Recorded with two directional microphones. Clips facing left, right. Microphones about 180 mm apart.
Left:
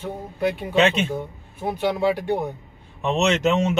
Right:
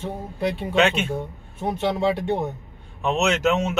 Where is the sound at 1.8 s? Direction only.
25° right (ahead or behind).